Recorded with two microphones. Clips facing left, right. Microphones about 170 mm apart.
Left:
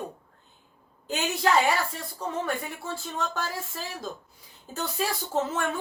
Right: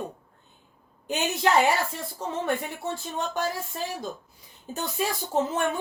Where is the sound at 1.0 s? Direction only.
20° right (ahead or behind).